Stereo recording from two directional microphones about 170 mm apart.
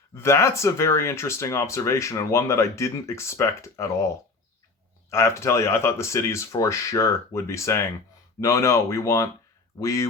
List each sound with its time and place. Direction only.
0.1 s speech: 15° left (ahead or behind)
5.1 s speech: 15° left (ahead or behind)